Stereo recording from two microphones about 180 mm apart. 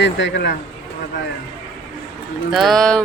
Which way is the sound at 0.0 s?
75° left (ahead or behind).